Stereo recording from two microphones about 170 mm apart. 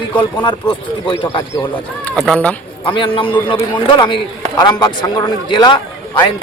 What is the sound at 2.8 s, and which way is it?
Speech, 30° left (ahead or behind).